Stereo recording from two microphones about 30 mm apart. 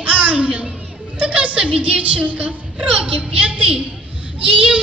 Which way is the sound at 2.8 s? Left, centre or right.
Right.